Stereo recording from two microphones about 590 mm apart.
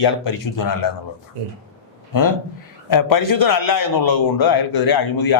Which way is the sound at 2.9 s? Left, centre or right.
Left.